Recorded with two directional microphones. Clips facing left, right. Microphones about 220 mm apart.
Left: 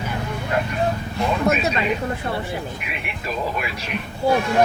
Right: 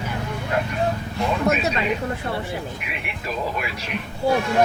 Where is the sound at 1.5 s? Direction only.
15° left (ahead or behind).